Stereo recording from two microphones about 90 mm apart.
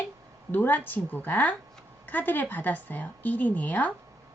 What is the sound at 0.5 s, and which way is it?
A woman's voice, 20° left (ahead or behind).